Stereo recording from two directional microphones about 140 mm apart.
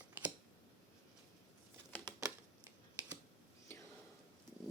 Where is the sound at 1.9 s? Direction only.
10° left (ahead or behind).